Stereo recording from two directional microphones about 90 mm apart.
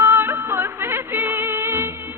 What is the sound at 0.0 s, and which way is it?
Music, 30° right (ahead or behind).